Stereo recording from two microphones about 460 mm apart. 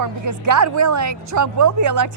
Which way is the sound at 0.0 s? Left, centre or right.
Right.